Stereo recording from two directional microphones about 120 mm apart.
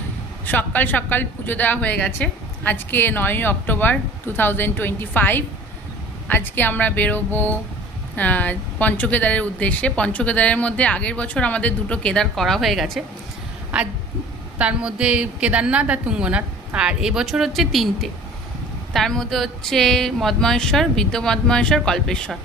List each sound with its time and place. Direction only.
0.4 s a woman's voice: 15° left (ahead or behind)